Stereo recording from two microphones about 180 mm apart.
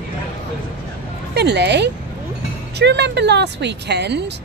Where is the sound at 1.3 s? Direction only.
70° right (ahead or behind).